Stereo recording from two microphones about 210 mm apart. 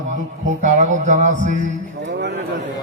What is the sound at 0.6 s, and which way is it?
Mantra, 35° right (ahead or behind).